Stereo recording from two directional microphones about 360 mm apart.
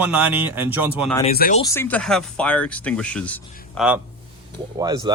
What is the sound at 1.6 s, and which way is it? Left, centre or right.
A man's voice, centre.